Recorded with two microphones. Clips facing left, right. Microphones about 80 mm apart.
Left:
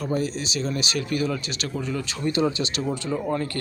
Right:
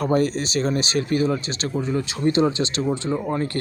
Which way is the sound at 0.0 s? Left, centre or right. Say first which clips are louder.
Right 6 dB; right.